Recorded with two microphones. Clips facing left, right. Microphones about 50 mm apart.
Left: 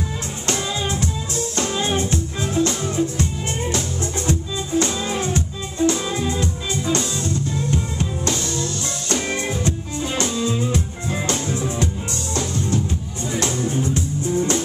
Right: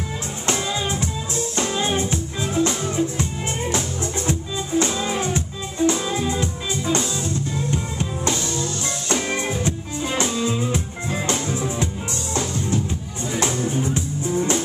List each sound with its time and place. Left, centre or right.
0.5 s music: centre